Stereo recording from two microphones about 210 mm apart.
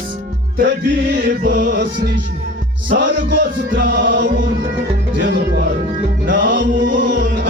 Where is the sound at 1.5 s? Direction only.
50° right (ahead or behind).